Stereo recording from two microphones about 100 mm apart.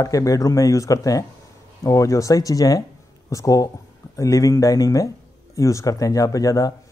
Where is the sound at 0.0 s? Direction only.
35° left (ahead or behind).